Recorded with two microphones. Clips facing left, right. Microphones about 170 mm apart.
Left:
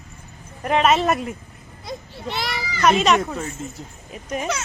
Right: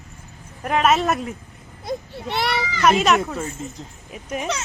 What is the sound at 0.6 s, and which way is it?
Speech, centre (ahead or behind).